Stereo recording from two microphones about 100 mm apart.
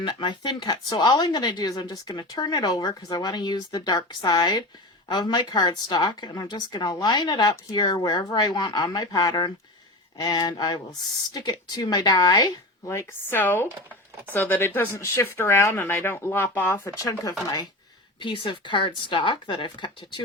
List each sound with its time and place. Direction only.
0.0 s speech: 50° left (ahead or behind)
12.9 s speech: 25° left (ahead or behind)
17.0 s speech: 35° left (ahead or behind)
18.2 s speech: 60° left (ahead or behind)